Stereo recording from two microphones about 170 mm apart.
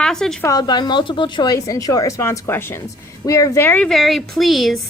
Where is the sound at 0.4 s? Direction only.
20° left (ahead or behind); by 4.8 s centre (ahead or behind).